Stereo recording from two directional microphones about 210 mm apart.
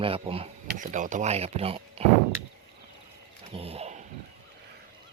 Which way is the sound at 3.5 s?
30° right (ahead or behind).